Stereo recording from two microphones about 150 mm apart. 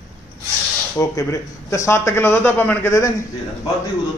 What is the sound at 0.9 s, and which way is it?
Speech, 20° left (ahead or behind).